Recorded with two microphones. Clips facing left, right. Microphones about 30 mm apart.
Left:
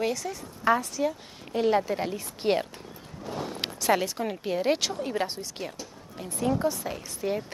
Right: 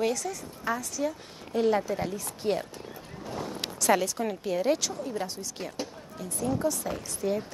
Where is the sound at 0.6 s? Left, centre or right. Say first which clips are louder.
Left 8 dB; left.